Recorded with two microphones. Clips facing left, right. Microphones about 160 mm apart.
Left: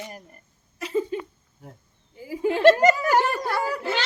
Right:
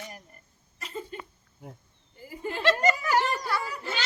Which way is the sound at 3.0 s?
50° left (ahead or behind).